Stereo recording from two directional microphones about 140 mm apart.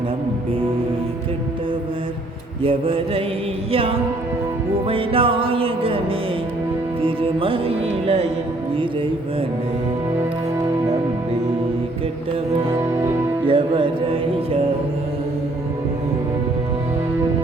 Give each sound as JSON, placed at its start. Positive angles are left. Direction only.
{"t": 2.6, "sound": "music", "side_deg": -40}
{"t": 13.4, "sound": "music", "side_deg": -35}